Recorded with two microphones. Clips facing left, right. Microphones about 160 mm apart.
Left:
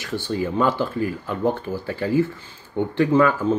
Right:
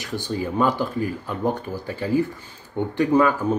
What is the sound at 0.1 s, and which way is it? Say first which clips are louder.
Speech: left 2 dB; 15° right (ahead or behind).